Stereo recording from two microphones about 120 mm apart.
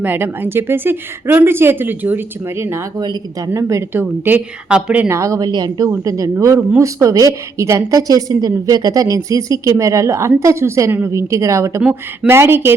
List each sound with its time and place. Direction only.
0.0 s speech: 15° right (ahead or behind)
3.0 s a woman's voice: 35° right (ahead or behind)
3.5 s a woman's voice: 25° right (ahead or behind)
5.0 s a woman's voice: 25° right (ahead or behind)
11.8 s speech: 10° right (ahead or behind)
12.3 s a woman's voice: 20° right (ahead or behind)